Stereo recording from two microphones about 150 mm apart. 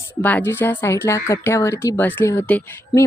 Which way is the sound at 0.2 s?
10° left (ahead or behind).